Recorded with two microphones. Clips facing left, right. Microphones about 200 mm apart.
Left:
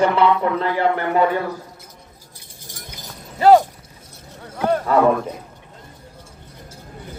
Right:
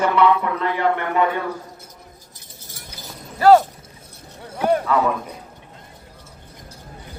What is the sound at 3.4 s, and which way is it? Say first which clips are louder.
Speech: even; 15° left (ahead or behind).